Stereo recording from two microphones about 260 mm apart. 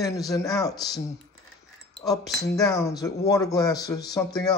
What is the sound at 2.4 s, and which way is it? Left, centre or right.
Speech, centre.